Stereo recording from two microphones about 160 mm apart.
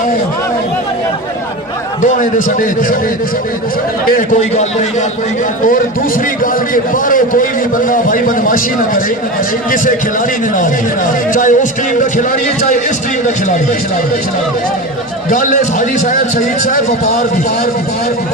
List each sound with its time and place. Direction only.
2.0 s a man's voice: 55° left (ahead or behind)
4.0 s a man's voice: 65° left (ahead or behind)
4.4 s a man's voice: 45° left (ahead or behind)
6.9 s a man's voice: 55° left (ahead or behind)
15.3 s a man's voice: 55° left (ahead or behind)